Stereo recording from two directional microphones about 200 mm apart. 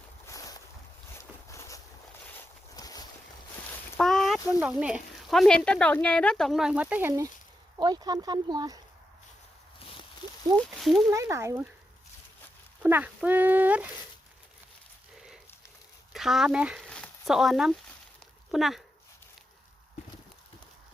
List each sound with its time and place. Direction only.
0.3 s boat: 15° left (ahead or behind)
3.9 s a sound: centre (ahead or behind)
4.6 s speech: 5° right (ahead or behind)
7.8 s speech: 20° right (ahead or behind)
9.8 s a sound: 25° left (ahead or behind)
10.8 s speech: centre (ahead or behind)
11.1 s speech: 15° right (ahead or behind)
12.8 s speech: 10° right (ahead or behind)
16.1 s speech: centre (ahead or behind)